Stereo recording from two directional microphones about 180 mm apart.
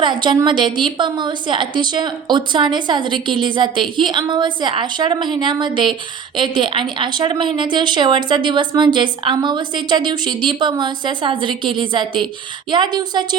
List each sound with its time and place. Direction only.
0.0 s a woman's voice: 25° right (ahead or behind)